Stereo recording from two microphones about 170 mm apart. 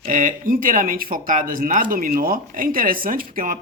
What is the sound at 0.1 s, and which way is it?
A man's voice, 55° right (ahead or behind).